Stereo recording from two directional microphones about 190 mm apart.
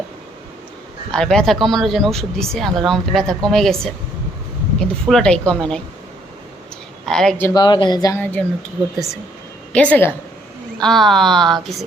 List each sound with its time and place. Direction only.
1.1 s speech: 5° left (ahead or behind)
4.8 s speech: 5° left (ahead or behind)
7.0 s speech: 5° left (ahead or behind)
7.5 s speech: 25° left (ahead or behind)
8.2 s speech: 10° left (ahead or behind)
9.7 s speech: 5° left (ahead or behind)